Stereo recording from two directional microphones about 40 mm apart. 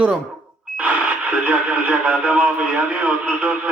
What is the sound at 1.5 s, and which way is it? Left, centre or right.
Speech, right.